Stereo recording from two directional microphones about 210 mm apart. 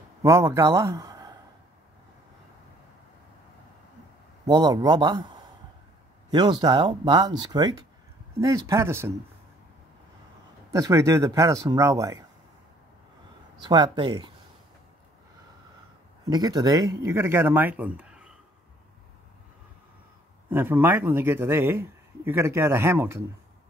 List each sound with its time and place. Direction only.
0.2 s speech: 15° right (ahead or behind)
4.5 s a man's voice: 20° right (ahead or behind)
10.7 s a man's voice: 15° right (ahead or behind)
13.6 s speech: 20° right (ahead or behind)
16.3 s a man's voice: 20° right (ahead or behind)
20.4 s a man's voice: 10° right (ahead or behind)